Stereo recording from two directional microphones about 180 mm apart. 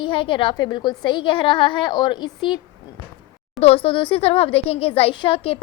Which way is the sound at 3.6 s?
30° left (ahead or behind).